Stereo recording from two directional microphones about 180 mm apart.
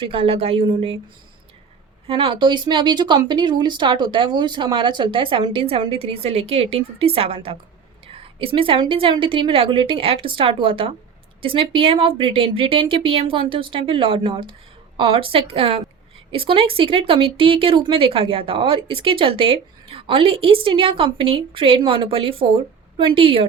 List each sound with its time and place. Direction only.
0.0 s speech: 30° right (ahead or behind)
2.0 s speech: 30° right (ahead or behind)